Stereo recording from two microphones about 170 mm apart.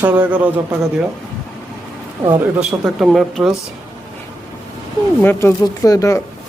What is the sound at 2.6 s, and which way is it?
Speech, 5° right (ahead or behind).